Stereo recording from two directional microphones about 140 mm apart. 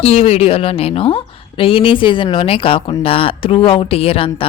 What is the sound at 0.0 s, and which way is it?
A woman's voice, 50° left (ahead or behind).